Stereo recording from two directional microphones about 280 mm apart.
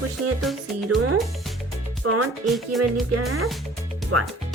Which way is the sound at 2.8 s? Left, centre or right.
Right.